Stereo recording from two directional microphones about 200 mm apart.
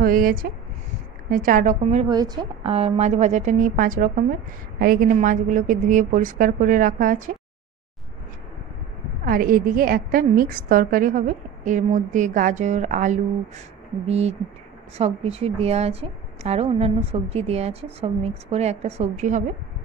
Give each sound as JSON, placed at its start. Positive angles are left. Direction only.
{"t": 0.0, "sound": "a woman's voice", "side_deg": -45}
{"t": 2.0, "sound": "a woman's voice", "side_deg": -20}
{"t": 9.2, "sound": "a woman's voice", "side_deg": -45}